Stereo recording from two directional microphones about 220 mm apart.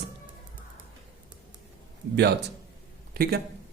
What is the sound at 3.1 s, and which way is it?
Speech, 40° right (ahead or behind).